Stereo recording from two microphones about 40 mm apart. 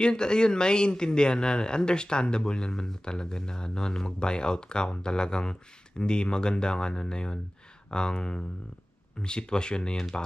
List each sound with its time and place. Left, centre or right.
0.0 s speech: left